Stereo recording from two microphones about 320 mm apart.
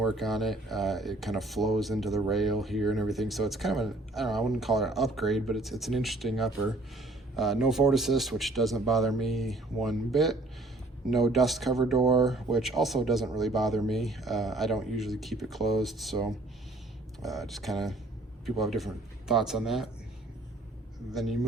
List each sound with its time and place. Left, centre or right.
0.0 s speech: centre
17.2 s speech: centre
21.1 s speech: centre